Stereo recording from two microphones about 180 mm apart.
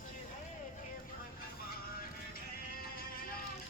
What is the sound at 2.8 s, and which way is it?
Music, 55° left (ahead or behind).